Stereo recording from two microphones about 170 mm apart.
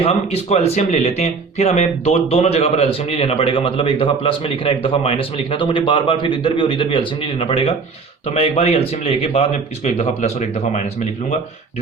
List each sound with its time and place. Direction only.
0.0 s speech: 35° left (ahead or behind)